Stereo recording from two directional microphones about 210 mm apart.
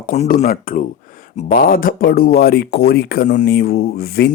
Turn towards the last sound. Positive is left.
turn(degrees=45)  # may be behind; listen again after turning